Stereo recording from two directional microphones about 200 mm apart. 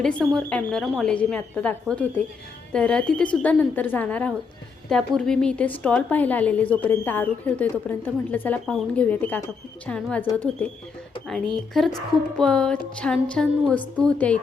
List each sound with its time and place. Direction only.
0.0 s a woman's voice: 5° left (ahead or behind)
11.3 s speech: centre (ahead or behind)